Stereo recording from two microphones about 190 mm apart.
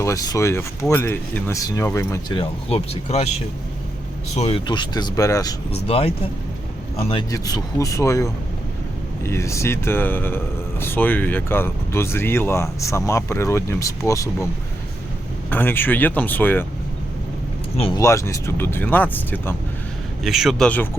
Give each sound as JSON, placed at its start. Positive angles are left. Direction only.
{"t": 0.0, "sound": "speech", "side_deg": 15}
{"t": 2.4, "sound": "speech", "side_deg": 30}
{"t": 5.7, "sound": "speech", "side_deg": 30}
{"t": 15.4, "sound": "speech", "side_deg": 10}
{"t": 17.7, "sound": "speech", "side_deg": 30}
{"t": 18.0, "sound": "speech", "side_deg": 15}
{"t": 20.2, "sound": "a man's voice", "side_deg": 0}